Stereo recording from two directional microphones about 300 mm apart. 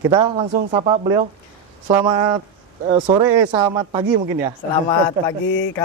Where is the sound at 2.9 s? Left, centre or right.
Centre.